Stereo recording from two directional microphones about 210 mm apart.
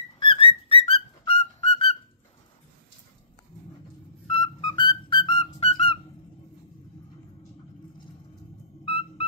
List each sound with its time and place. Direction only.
0.2 s music: 25° left (ahead or behind)
4.3 s music: 25° left (ahead or behind)